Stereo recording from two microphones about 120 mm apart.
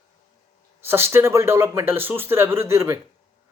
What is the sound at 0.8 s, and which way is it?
Speech, 20° right (ahead or behind).